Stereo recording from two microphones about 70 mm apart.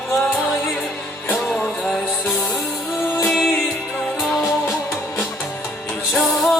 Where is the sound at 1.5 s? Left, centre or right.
Centre.